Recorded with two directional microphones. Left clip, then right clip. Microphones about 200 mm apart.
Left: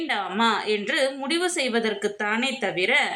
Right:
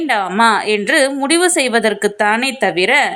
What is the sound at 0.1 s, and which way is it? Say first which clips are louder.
A woman's voice: right 10 dB; 40° right (ahead or behind).